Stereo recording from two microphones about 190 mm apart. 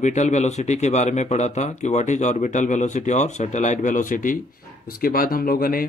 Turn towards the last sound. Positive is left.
turn(degrees=50)  # may be behind; listen again after turning